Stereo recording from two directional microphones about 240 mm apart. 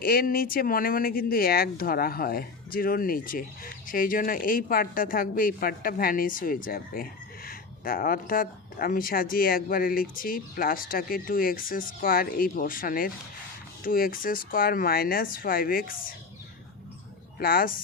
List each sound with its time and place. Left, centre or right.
0.0 s speech: left
17.4 s speech: left